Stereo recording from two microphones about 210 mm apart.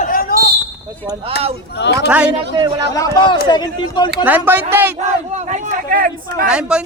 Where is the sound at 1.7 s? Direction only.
55° left (ahead or behind).